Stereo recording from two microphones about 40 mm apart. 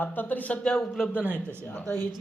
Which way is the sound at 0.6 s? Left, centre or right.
Centre.